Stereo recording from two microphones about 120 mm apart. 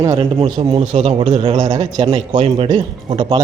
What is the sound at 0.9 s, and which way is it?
Speech, 70° right (ahead or behind).